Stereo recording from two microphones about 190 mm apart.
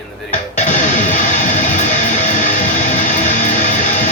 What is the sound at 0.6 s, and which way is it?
Music, 40° left (ahead or behind).